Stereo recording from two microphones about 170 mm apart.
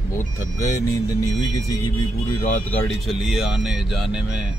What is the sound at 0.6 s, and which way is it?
Speech, 20° left (ahead or behind).